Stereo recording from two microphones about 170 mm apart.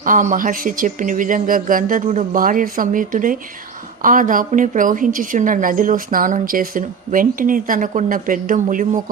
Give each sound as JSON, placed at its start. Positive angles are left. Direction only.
{"t": 0.0, "sound": "a woman's voice", "side_deg": -50}